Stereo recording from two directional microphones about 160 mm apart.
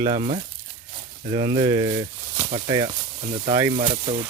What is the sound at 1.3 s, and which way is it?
Speech, 30° right (ahead or behind).